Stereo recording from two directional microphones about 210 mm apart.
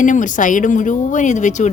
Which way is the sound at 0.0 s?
35° left (ahead or behind).